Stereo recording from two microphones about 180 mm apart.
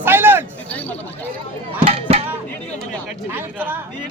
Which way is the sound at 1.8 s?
35° right (ahead or behind).